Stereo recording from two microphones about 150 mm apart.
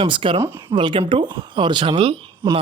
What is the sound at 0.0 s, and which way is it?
A man's voice, 35° right (ahead or behind).